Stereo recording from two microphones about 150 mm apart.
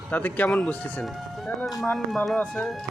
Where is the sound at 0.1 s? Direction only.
10° left (ahead or behind).